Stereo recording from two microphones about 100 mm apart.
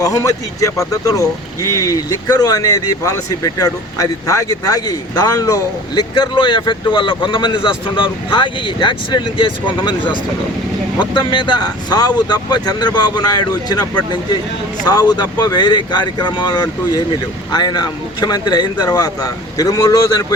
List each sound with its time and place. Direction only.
0.0 s speech: 35° left (ahead or behind)
11.0 s speech: 50° left (ahead or behind)
14.8 s speech: 40° left (ahead or behind)